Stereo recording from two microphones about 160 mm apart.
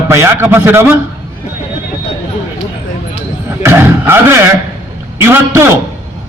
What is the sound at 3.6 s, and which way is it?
A man's voice, 15° right (ahead or behind).